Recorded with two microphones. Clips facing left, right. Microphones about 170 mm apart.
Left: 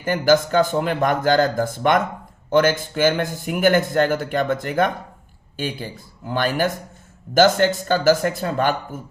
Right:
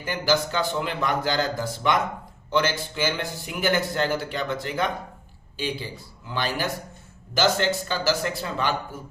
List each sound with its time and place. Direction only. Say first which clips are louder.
0.0 s a man's voice: left 7 dB; 50° left (ahead or behind)